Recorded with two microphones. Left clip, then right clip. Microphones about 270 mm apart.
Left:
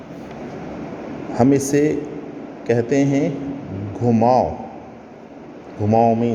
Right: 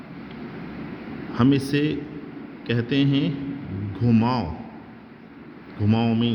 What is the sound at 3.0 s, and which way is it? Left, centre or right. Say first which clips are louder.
Speech: left 5 dB; right.